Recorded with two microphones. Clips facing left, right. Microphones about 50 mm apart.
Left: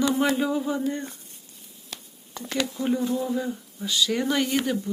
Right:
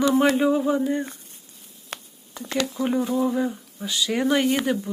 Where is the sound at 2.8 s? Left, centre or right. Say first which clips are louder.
Right 3 dB; right.